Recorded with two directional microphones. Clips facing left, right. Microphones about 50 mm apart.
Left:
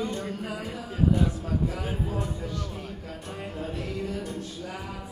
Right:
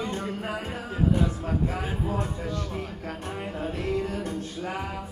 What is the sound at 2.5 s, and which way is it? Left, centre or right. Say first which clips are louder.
Music: right 3 dB; right.